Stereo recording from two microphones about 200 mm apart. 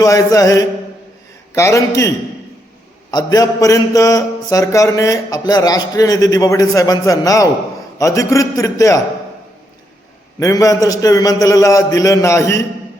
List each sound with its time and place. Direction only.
0.0 s a man's voice: 15° left (ahead or behind)
10.4 s a man's voice: 15° left (ahead or behind)